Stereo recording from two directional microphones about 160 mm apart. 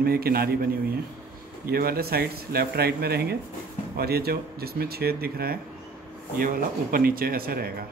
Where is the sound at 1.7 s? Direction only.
70° right (ahead or behind).